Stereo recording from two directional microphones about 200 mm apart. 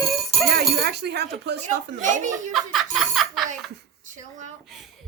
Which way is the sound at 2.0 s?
40° right (ahead or behind).